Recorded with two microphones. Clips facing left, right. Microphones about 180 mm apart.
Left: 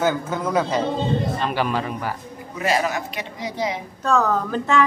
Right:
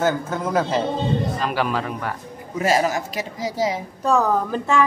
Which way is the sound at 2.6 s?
40° right (ahead or behind).